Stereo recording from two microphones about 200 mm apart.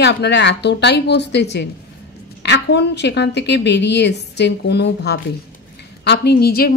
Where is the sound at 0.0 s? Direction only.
60° left (ahead or behind).